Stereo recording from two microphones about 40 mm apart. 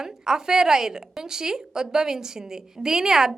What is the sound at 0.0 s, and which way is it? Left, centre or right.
A woman's voice, centre.